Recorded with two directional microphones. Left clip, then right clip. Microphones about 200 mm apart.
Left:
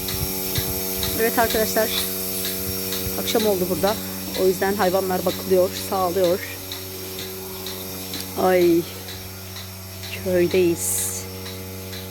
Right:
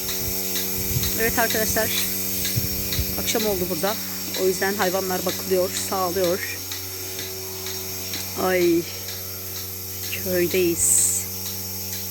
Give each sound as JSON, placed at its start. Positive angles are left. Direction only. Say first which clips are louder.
{"t": 1.2, "sound": "speech", "louder": "left 3 dB", "side_deg": 0}
{"t": 3.2, "sound": "speech", "louder": "left 4 dB", "side_deg": 0}
{"t": 8.4, "sound": "speech", "louder": "left 4 dB", "side_deg": 5}
{"t": 10.3, "sound": "speech", "louder": "left 3 dB", "side_deg": 5}